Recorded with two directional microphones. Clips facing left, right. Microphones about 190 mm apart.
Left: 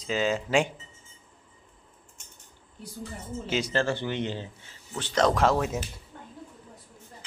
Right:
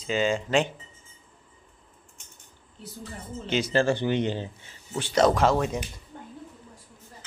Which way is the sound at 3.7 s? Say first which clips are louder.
Right 8 dB; 15° right (ahead or behind).